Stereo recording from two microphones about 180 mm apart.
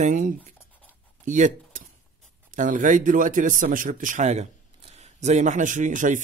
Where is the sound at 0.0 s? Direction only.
45° right (ahead or behind).